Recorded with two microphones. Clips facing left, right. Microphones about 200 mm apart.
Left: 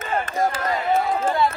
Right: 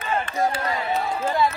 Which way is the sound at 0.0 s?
45° left (ahead or behind).